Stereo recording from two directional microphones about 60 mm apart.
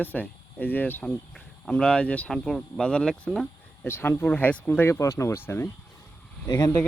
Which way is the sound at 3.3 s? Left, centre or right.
Centre.